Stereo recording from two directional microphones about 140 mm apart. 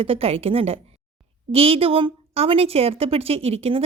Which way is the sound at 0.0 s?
45° right (ahead or behind).